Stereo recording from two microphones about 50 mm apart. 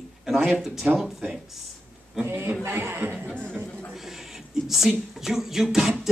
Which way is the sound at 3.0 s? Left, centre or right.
Right.